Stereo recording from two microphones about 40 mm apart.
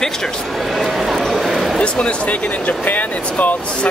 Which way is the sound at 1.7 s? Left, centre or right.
Left.